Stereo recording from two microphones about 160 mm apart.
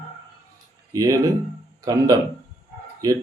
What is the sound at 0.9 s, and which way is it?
Speech, 20° right (ahead or behind).